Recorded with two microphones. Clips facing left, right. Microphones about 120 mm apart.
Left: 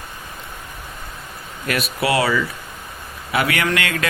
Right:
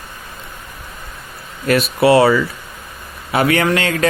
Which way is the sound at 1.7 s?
35° right (ahead or behind).